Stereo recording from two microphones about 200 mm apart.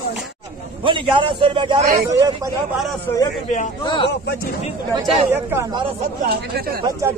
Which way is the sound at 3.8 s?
25° left (ahead or behind).